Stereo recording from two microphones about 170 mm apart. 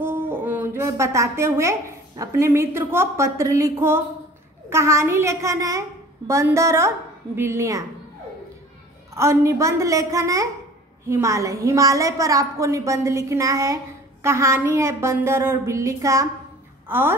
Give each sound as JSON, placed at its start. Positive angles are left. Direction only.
{"t": 0.0, "sound": "a woman's voice", "side_deg": -10}
{"t": 9.1, "sound": "a woman's voice", "side_deg": -15}